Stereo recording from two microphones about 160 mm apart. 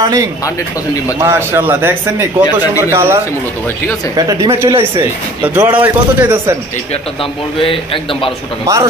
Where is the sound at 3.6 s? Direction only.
15° left (ahead or behind).